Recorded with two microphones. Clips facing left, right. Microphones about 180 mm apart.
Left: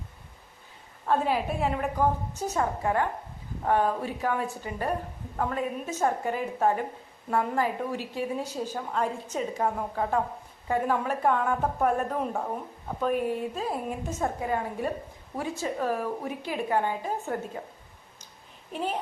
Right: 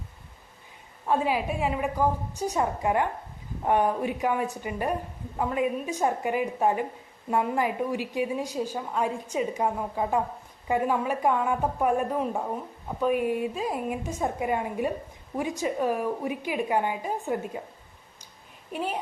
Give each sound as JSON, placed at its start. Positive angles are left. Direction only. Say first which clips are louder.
{"t": 1.0, "sound": "a woman's voice", "louder": "even", "side_deg": -10}
{"t": 18.7, "sound": "a woman's voice", "louder": "even", "side_deg": -10}